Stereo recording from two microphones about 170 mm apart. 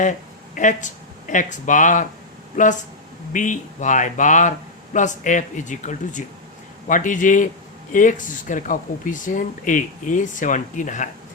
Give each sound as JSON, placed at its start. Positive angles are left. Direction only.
{"t": 0.0, "sound": "speech", "side_deg": 50}